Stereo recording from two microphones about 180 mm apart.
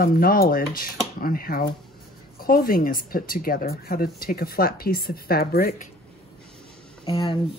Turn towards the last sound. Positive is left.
turn(degrees=30)  # may be behind; listen again after turning